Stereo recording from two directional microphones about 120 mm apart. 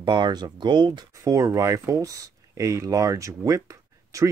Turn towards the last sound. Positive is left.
turn(degrees=-25)  # may be behind; listen again after turning